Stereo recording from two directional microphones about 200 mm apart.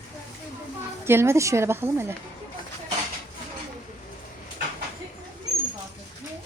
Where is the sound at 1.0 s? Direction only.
10° right (ahead or behind).